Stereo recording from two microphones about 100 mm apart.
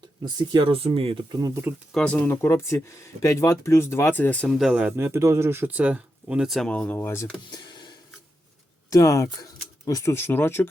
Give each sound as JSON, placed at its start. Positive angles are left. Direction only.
{"t": 0.3, "sound": "speech", "side_deg": -45}
{"t": 1.3, "sound": "speech", "side_deg": -40}
{"t": 1.9, "sound": "speech", "side_deg": 5}
{"t": 2.1, "sound": "speech", "side_deg": 20}
{"t": 4.5, "sound": "speech", "side_deg": -5}
{"t": 4.8, "sound": "speech", "side_deg": -20}
{"t": 6.6, "sound": "speech", "side_deg": 10}
{"t": 6.9, "sound": "speech", "side_deg": 25}
{"t": 7.5, "sound": "a sound", "side_deg": 50}
{"t": 8.9, "sound": "speech", "side_deg": 35}